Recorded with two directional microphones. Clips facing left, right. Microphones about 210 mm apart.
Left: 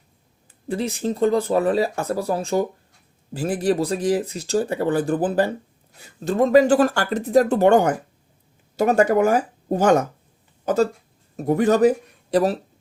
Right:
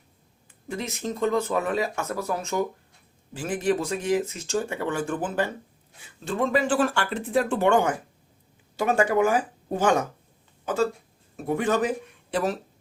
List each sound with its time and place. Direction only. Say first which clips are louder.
0.7 s speech: left 7 dB; 30° left (ahead or behind)
11.3 s speech: left 7 dB; 40° left (ahead or behind)